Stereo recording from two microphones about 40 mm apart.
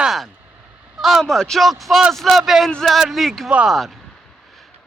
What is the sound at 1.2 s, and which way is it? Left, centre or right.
Speech, centre.